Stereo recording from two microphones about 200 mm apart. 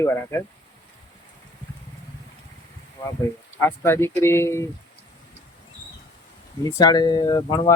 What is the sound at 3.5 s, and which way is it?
Speech, 10° left (ahead or behind).